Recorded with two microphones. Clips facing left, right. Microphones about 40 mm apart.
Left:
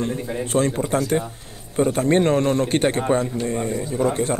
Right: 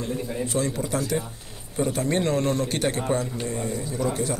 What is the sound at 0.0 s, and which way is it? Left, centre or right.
A man's voice, left.